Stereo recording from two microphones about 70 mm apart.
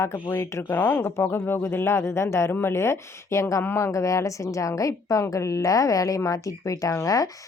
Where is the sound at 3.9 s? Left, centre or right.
Left.